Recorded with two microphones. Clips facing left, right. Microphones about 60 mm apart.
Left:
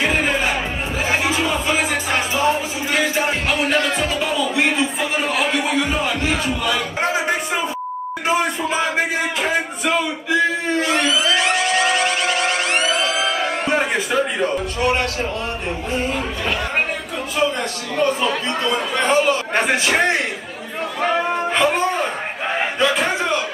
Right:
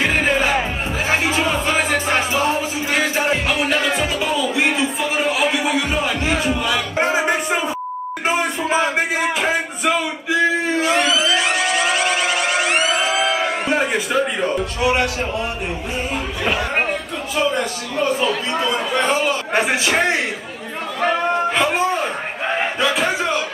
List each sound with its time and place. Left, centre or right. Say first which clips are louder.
1.1 s music: right 1 dB; right
3.4 s music: even; centre
10.8 s a sound: right 1 dB; centre
11.3 s siren: left 1 dB; centre
13.2 s music: right 2 dB; centre
17.9 s speech: even; centre
21.0 s a sound: right 2 dB; centre